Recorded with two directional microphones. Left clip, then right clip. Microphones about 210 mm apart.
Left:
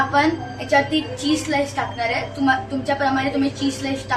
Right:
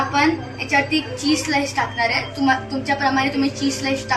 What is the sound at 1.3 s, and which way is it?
A woman's voice, 15° left (ahead or behind).